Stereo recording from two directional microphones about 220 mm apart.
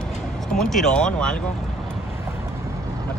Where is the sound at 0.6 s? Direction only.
Centre (ahead or behind).